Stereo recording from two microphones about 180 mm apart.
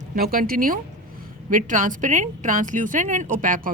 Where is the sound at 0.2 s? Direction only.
55° right (ahead or behind).